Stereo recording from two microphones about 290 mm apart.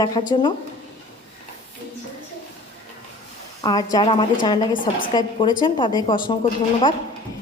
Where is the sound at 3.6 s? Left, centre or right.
Centre.